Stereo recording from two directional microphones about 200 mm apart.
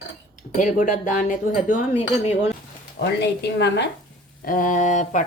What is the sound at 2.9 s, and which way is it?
Speech, 55° left (ahead or behind).